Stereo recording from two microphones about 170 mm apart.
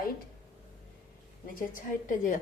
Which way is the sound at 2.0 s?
50° left (ahead or behind).